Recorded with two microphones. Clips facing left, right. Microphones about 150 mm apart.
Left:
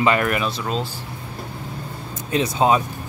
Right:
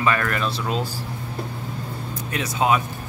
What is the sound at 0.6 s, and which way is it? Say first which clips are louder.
Speech: even; 5° right (ahead or behind).